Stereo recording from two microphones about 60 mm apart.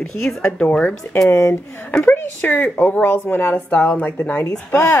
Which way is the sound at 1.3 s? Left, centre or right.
Left.